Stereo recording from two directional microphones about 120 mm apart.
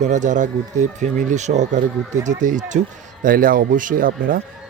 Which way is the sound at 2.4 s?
90° right.